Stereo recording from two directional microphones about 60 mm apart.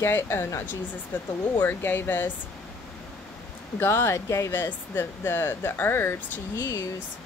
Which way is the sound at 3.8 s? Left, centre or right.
Left.